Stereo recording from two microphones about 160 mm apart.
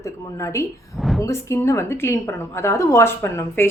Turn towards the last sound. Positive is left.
turn(degrees=15)  # may be behind; listen again after turning